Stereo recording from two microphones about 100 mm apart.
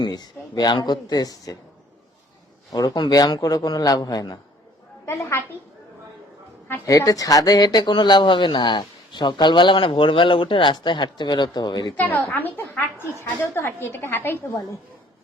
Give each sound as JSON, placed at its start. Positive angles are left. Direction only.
{"t": 0.0, "sound": "a man's voice", "side_deg": 40}
{"t": 2.7, "sound": "a man's voice", "side_deg": 40}
{"t": 5.0, "sound": "a woman's voice", "side_deg": 25}
{"t": 6.8, "sound": "speech", "side_deg": 35}
{"t": 11.9, "sound": "a woman's voice", "side_deg": 15}